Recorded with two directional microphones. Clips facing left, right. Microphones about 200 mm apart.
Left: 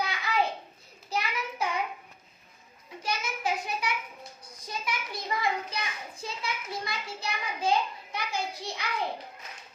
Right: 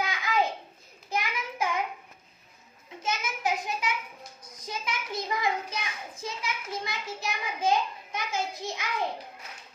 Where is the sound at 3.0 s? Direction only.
20° right (ahead or behind).